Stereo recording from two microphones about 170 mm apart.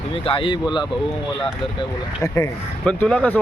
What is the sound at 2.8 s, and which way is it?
Speech, 5° left (ahead or behind).